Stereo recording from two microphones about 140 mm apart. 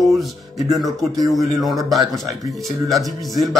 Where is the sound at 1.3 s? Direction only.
Centre (ahead or behind).